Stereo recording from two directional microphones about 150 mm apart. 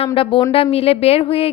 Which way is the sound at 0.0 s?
35° left (ahead or behind).